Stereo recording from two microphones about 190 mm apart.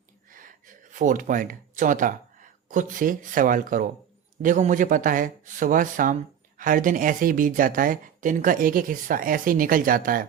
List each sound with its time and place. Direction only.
0.3 s speech: 45° right (ahead or behind)